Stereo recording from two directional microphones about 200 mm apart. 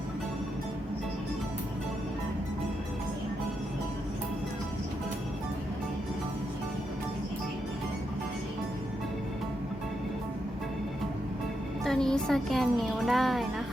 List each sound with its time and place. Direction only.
11.9 s speech: 5° left (ahead or behind)